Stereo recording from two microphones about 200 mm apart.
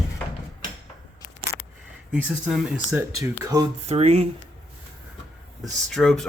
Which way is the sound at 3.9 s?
35° right (ahead or behind).